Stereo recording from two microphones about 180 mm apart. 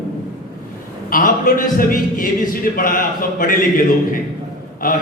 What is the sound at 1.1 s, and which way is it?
A man's voice, 50° left (ahead or behind).